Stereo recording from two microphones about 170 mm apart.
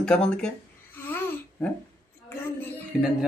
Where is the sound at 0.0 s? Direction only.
5° left (ahead or behind).